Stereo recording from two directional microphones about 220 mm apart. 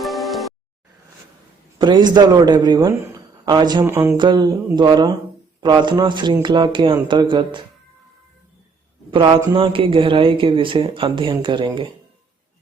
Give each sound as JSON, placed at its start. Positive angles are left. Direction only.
{"t": 0.0, "sound": "music", "side_deg": 0}
{"t": 1.8, "sound": "speech", "side_deg": -20}
{"t": 9.0, "sound": "speech", "side_deg": -25}